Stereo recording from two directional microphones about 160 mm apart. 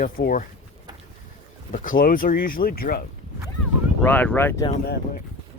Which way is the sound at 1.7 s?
60° left (ahead or behind).